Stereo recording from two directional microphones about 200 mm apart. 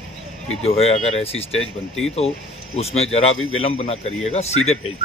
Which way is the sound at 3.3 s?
90° left.